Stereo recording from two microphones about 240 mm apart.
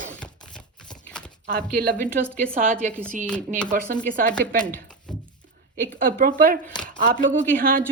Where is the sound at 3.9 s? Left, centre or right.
Right.